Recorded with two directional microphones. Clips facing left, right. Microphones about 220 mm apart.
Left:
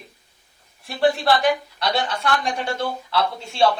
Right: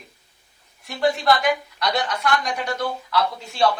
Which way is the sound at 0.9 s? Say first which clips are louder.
Left 1 dB; 30° left (ahead or behind).